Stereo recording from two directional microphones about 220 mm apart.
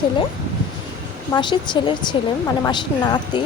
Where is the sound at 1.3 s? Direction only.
20° left (ahead or behind).